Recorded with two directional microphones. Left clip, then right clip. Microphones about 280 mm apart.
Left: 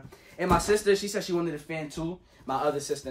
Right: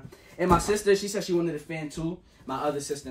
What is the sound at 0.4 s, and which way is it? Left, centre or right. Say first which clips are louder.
Speech: right 1 dB; centre.